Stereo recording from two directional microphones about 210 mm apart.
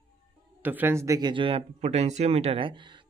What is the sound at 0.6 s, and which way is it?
Speech, 10° right (ahead or behind).